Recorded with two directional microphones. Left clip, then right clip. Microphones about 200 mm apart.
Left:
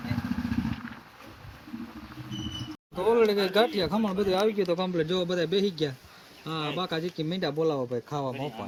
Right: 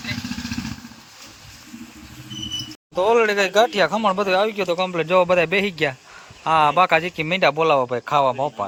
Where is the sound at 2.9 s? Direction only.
30° right (ahead or behind).